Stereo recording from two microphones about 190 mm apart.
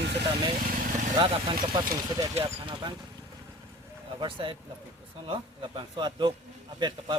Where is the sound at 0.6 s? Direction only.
45° right (ahead or behind).